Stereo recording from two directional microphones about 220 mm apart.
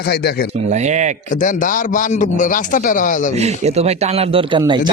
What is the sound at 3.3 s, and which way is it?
A man's voice, 30° right (ahead or behind).